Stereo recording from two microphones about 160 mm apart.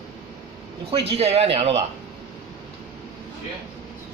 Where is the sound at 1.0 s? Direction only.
40° right (ahead or behind).